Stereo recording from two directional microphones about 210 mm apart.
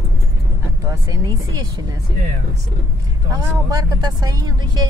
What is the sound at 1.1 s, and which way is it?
Speech, 15° right (ahead or behind).